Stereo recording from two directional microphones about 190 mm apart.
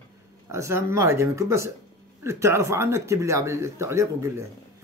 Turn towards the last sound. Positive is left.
turn(degrees=-15)  # may be behind; listen again after turning